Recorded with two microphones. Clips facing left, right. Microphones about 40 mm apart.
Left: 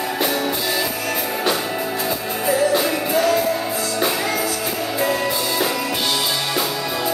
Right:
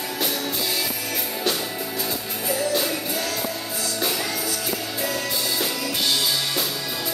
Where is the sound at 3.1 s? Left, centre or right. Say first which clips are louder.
Left 10 dB; left.